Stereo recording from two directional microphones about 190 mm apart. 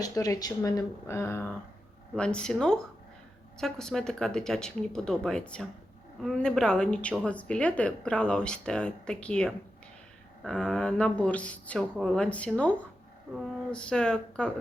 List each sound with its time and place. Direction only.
0.0 s a woman's voice: 20° left (ahead or behind)